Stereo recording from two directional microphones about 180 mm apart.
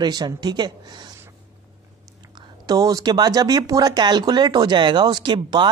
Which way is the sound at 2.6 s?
20° right (ahead or behind).